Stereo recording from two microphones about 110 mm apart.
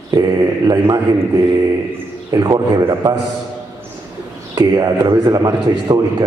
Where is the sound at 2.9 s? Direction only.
35° right (ahead or behind).